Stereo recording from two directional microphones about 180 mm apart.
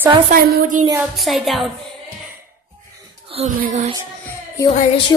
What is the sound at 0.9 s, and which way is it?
Speech, centre (ahead or behind).